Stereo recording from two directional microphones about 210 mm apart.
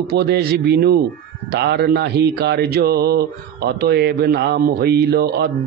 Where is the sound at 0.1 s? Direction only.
50° right (ahead or behind).